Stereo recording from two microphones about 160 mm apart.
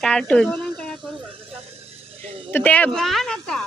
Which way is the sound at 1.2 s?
35° right (ahead or behind).